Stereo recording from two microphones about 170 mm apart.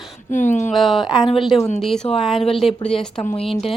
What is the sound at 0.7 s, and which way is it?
A woman's voice, centre (ahead or behind).